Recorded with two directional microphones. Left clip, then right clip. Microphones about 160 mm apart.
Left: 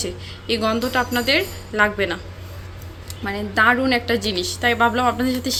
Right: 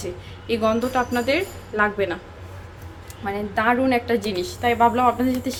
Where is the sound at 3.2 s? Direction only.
15° right (ahead or behind).